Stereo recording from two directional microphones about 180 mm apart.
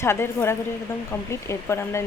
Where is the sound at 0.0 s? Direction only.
15° left (ahead or behind).